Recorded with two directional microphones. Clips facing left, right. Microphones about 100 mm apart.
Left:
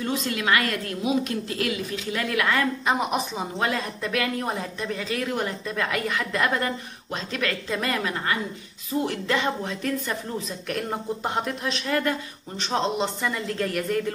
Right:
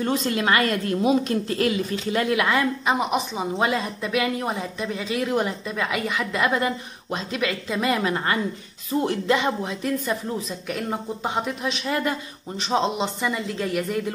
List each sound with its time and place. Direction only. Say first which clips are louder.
0.0 s a woman's voice: right 4 dB; 35° right (ahead or behind)
2.3 s speech: even; 15° right (ahead or behind)
2.9 s speech: right 2 dB; 5° right (ahead or behind)
8.0 s a woman's voice: right 3 dB; 30° right (ahead or behind)
8.9 s speech: right 2 dB; 45° right (ahead or behind)
9.3 s speech: right 3 dB; 15° right (ahead or behind)
11.9 s speech: left 2 dB; 15° right (ahead or behind)